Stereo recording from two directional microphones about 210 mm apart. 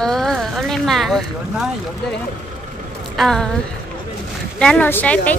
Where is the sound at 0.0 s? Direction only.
Centre (ahead or behind).